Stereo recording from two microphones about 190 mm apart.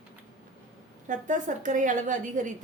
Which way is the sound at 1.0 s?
40° right (ahead or behind).